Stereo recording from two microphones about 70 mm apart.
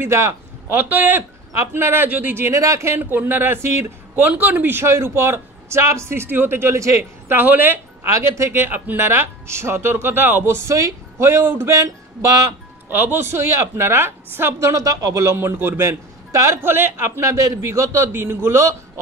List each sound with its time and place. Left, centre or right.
0.0 s speech: right
1.5 s a man's voice: right
3.0 s a man's voice: right
4.1 s a man's voice: right
8.1 s a man's voice: right
10.8 s a woman's voice: right
11.2 s a man's voice: right
11.7 s a sound: right
12.9 s a man's voice: right
14.7 s a man's voice: right
17.3 s a man's voice: right